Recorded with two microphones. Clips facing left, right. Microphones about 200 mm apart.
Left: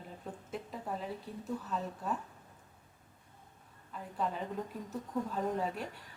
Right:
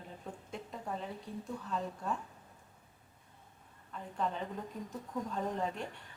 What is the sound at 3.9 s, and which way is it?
Speech, 5° left (ahead or behind).